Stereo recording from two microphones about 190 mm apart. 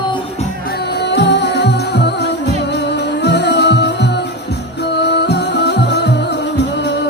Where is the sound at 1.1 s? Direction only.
65° left (ahead or behind).